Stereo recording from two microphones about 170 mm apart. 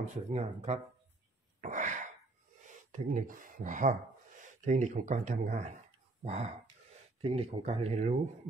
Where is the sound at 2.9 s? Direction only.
50° right (ahead or behind).